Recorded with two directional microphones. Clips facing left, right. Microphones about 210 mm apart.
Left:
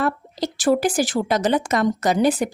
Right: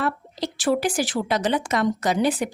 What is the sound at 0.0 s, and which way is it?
Speech, 45° left (ahead or behind).